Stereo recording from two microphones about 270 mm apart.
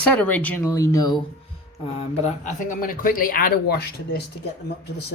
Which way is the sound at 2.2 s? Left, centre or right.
Left.